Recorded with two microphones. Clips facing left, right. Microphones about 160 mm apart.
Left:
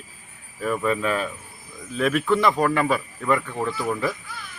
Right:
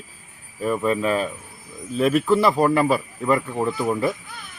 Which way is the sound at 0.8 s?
30° right (ahead or behind).